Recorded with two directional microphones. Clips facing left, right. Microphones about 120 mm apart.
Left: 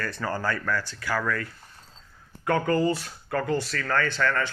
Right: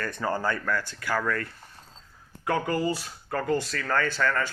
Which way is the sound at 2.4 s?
15° right (ahead or behind).